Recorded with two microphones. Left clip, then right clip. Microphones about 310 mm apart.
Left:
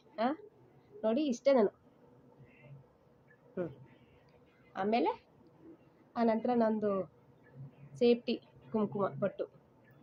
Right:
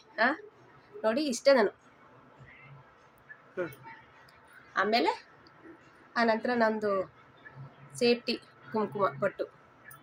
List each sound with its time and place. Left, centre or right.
0.2 s speech: left
4.7 s a woman's voice: left
6.1 s speech: left